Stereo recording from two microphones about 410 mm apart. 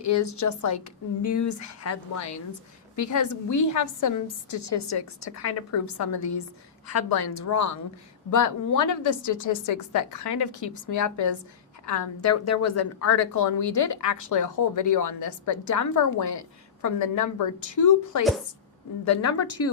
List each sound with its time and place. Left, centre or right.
0.0 s a woman's voice: left